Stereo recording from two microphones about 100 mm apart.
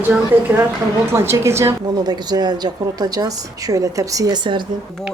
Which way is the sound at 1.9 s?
45° right (ahead or behind).